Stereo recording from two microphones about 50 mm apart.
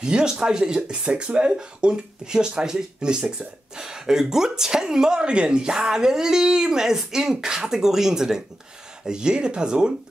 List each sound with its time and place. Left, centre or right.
0.0 s speech: centre